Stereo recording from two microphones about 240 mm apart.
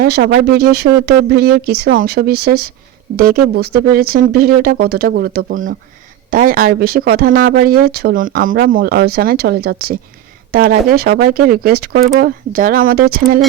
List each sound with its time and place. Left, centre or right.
0.0 s speech: right